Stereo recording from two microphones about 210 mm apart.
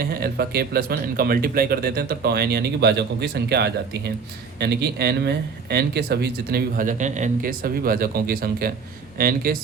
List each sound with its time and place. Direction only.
0.0 s speech: 45° right (ahead or behind)